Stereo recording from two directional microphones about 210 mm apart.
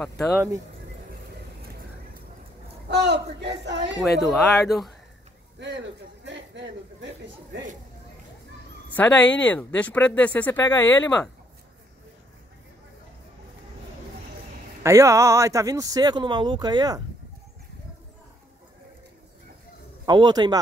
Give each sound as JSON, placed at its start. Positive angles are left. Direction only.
{"t": 0.0, "sound": "speech", "side_deg": 0}
{"t": 2.9, "sound": "speech", "side_deg": -55}
{"t": 4.0, "sound": "speech", "side_deg": 0}
{"t": 5.6, "sound": "a sound", "side_deg": -60}
{"t": 8.9, "sound": "speech", "side_deg": 10}
{"t": 14.8, "sound": "speech", "side_deg": -15}
{"t": 20.1, "sound": "a man's voice", "side_deg": -20}